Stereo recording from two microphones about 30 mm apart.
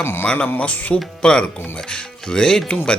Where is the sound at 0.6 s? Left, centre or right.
Left.